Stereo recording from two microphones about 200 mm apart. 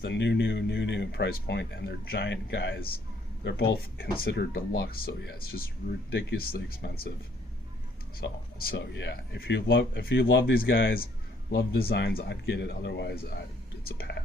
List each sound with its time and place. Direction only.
0.0 s speech: 60° left (ahead or behind)
8.2 s speech: 50° left (ahead or behind)